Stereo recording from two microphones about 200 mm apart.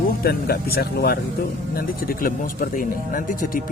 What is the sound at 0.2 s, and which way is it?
Speech, 50° left (ahead or behind).